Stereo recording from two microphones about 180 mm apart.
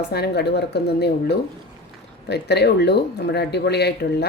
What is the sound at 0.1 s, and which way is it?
A woman's voice, 65° left (ahead or behind).